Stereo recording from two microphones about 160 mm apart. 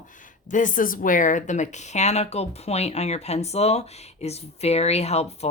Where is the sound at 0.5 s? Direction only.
55° left (ahead or behind).